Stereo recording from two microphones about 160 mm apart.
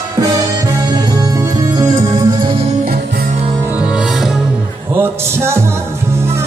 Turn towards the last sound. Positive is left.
turn(degrees=-15)  # may be behind; listen again after turning